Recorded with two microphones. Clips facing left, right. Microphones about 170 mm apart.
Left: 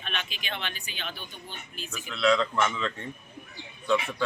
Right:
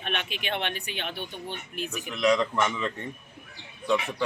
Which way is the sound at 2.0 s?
15° right (ahead or behind).